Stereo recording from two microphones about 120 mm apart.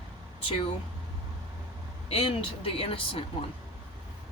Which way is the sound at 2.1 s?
55° left (ahead or behind).